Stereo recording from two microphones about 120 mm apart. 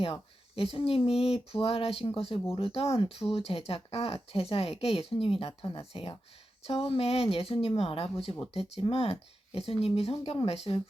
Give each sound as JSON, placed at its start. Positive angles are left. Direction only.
{"t": 0.0, "sound": "speech", "side_deg": 55}